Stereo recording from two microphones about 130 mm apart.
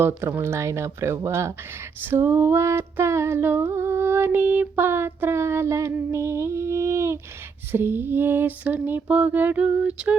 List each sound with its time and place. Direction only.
0.0 s speech: 20° right (ahead or behind)
2.0 s female singing: 15° right (ahead or behind)
7.7 s a sound: 15° right (ahead or behind)